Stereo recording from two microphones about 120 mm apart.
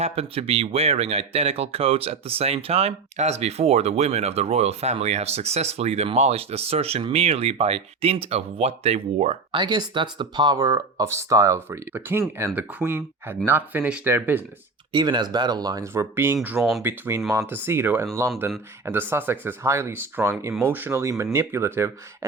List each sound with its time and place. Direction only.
0.0 s speech: 55° right (ahead or behind)
9.5 s speech: 40° right (ahead or behind)
10.6 s speech: 25° right (ahead or behind)
14.9 s speech: 40° right (ahead or behind); by 16.6 s 15° right (ahead or behind)
16.6 s speech: centre (ahead or behind)
16.8 s speech: 20° right (ahead or behind)